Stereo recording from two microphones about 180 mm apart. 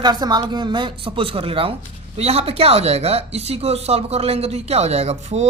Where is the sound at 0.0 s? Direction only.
25° right (ahead or behind).